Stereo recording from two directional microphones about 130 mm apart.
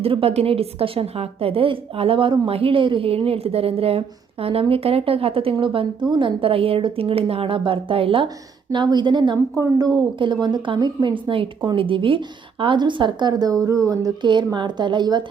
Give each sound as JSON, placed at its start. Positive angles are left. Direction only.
{"t": 0.0, "sound": "a woman's voice", "side_deg": -45}